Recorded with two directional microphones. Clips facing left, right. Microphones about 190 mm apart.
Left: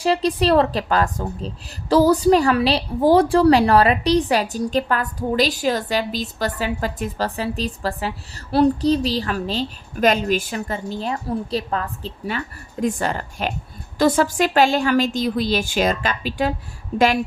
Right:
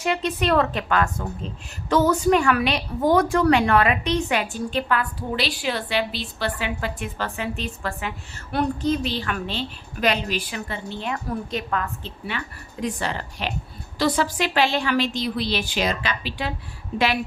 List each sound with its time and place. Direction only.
0.0 s a woman's voice: 35° left (ahead or behind)